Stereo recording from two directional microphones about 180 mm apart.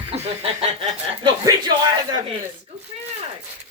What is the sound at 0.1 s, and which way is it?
Speech, 30° right (ahead or behind).